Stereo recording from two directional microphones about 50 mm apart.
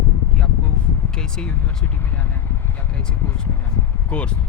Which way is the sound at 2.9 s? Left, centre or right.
Centre.